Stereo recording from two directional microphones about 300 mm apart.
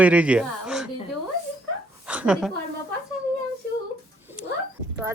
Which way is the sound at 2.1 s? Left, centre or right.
Centre.